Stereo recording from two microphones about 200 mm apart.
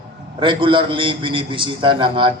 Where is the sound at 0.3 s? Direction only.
25° right (ahead or behind).